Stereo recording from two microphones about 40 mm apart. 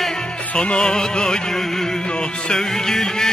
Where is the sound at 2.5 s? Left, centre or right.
Centre.